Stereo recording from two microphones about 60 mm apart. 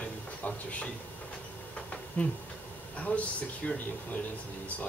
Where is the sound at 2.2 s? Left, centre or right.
Left.